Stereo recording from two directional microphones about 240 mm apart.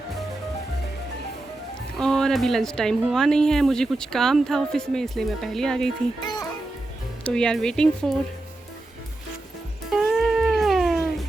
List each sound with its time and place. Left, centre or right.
2.0 s speech: centre
6.2 s music: centre
7.3 s speech: centre
9.9 s cat: centre